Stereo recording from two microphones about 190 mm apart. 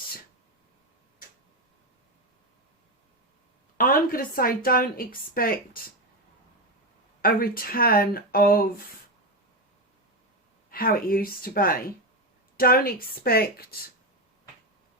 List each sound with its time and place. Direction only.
3.8 s a woman's voice: 50° left (ahead or behind)
7.2 s a woman's voice: 50° left (ahead or behind)
10.7 s a woman's voice: 50° left (ahead or behind)